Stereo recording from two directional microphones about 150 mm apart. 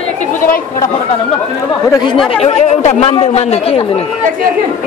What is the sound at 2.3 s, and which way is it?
Speech, 45° left (ahead or behind).